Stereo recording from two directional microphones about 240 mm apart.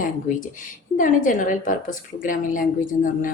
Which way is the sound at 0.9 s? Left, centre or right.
Left.